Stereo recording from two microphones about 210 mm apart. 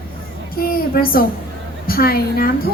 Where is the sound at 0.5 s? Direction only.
45° left (ahead or behind).